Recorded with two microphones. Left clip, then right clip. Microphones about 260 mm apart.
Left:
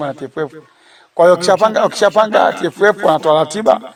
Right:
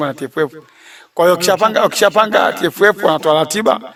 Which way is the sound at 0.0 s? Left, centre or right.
Right.